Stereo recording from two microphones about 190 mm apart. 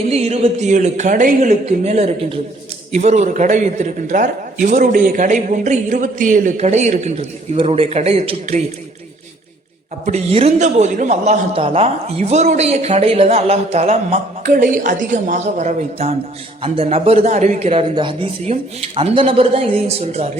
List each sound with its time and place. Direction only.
0.1 s a man's voice: 35° right (ahead or behind)
10.1 s a man's voice: 35° right (ahead or behind)